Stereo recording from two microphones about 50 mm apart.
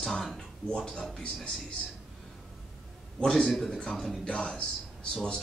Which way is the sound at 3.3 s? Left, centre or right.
Centre.